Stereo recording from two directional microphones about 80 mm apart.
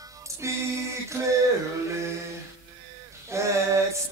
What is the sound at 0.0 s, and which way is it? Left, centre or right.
Music, right.